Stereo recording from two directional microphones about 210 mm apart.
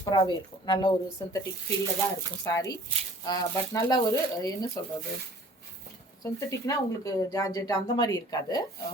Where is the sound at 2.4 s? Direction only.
15° left (ahead or behind).